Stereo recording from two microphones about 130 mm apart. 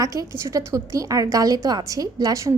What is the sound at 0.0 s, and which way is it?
A woman's voice, 25° right (ahead or behind).